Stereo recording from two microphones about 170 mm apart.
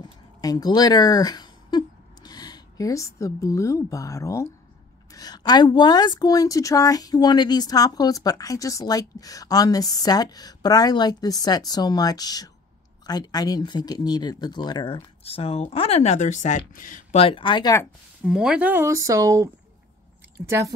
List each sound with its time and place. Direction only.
0.4 s a woman's voice: 20° left (ahead or behind); by 17.2 s 50° left (ahead or behind)
17.2 s a woman's voice: 30° left (ahead or behind)
18.2 s speech: 5° right (ahead or behind)